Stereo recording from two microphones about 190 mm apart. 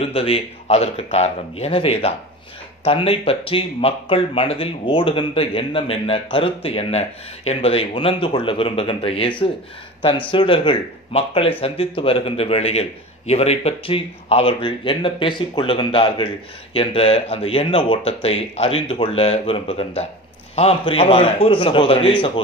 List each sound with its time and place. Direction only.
0.0 s a man's voice: 30° left (ahead or behind)